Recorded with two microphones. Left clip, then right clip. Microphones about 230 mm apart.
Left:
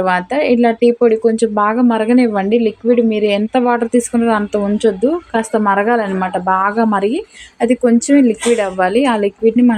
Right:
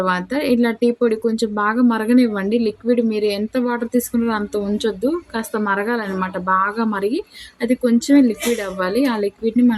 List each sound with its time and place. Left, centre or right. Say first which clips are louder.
0.0 s speech: left 6 dB; centre